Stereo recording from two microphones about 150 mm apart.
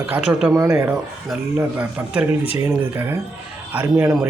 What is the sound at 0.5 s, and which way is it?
Speech, 20° right (ahead or behind).